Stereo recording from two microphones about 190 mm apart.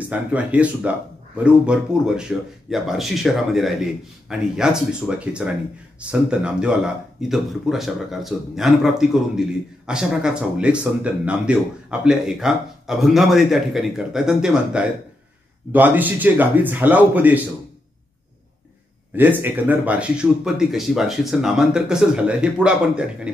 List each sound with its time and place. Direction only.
0.0 s a man's voice: 10° right (ahead or behind)
19.1 s speech: 10° right (ahead or behind)